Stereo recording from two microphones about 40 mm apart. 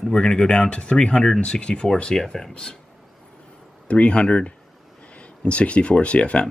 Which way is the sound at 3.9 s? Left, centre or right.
Left.